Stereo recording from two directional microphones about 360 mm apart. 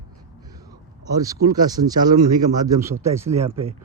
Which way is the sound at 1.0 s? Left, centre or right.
Centre.